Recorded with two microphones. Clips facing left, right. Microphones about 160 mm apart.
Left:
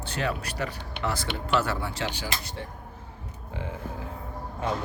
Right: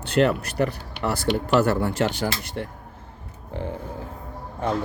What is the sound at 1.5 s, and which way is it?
Speech, 45° right (ahead or behind).